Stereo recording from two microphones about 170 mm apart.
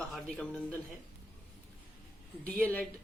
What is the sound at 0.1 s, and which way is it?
Speech, 5° left (ahead or behind).